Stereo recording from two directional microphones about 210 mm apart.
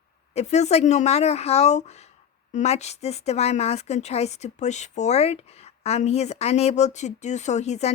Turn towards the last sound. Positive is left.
turn(degrees=30)  # may be behind; listen again after turning